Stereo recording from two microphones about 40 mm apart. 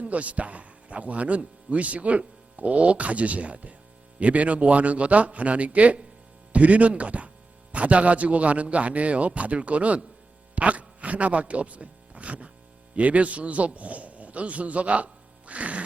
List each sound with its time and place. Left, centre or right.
0.0 s a man's voice: right